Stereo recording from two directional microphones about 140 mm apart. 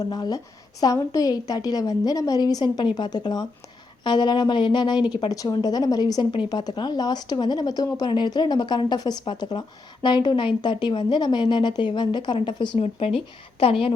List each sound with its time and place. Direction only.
0.1 s a woman's voice: 30° left (ahead or behind)